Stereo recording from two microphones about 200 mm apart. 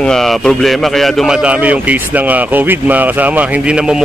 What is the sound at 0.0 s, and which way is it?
A man's voice, centre (ahead or behind).